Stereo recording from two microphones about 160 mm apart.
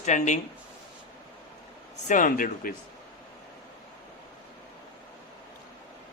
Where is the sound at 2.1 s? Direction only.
55° left (ahead or behind).